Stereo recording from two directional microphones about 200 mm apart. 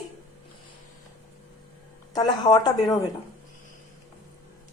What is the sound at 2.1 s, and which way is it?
Speech, 20° left (ahead or behind).